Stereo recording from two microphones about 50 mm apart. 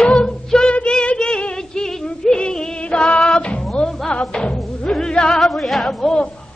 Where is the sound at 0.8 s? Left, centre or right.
Left.